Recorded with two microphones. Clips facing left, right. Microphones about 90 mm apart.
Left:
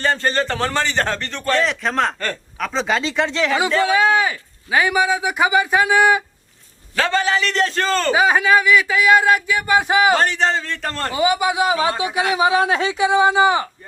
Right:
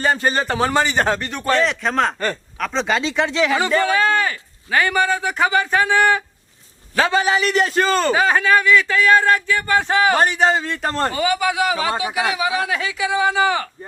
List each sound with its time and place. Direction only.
0.0 s a man's voice: 10° right (ahead or behind)
3.8 s a man's voice: 5° left (ahead or behind)
6.9 s a man's voice: 15° right (ahead or behind)
8.1 s a man's voice: 10° left (ahead or behind)
10.2 s a man's voice: 10° right (ahead or behind)
11.1 s speech: 15° left (ahead or behind)
11.9 s speech: 25° right (ahead or behind)
12.3 s speech: 25° left (ahead or behind)